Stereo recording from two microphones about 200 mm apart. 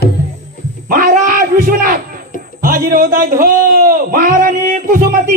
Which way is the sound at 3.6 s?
45° right (ahead or behind).